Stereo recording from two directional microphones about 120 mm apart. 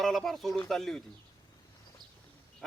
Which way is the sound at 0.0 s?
Centre (ahead or behind).